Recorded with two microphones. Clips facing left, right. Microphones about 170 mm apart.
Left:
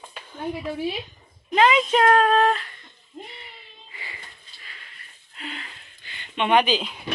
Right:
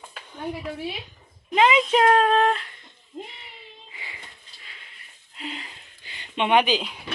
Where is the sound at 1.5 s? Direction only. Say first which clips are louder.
Even; 15° right (ahead or behind).